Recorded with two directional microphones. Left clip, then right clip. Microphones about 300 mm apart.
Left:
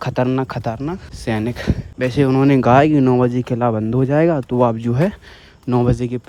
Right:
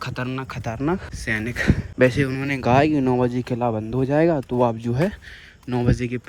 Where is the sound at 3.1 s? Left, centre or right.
Right.